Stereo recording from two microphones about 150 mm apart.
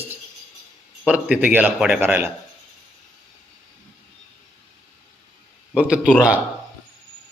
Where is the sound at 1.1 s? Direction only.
10° right (ahead or behind).